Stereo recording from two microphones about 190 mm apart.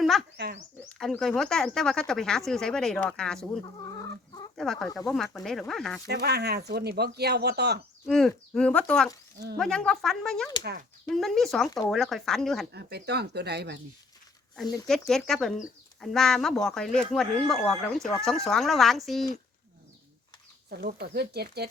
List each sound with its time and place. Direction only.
0.0 s bird: centre (ahead or behind)
0.3 s speech: 60° right (ahead or behind)
0.9 s speech: 5° left (ahead or behind)
6.1 s speech: 60° right (ahead or behind)
8.0 s speech: centre (ahead or behind)
10.6 s speech: 60° right (ahead or behind)
11.1 s speech: centre (ahead or behind)
12.7 s speech: 60° right (ahead or behind)
14.8 s speech: centre (ahead or behind)
20.8 s speech: 55° right (ahead or behind)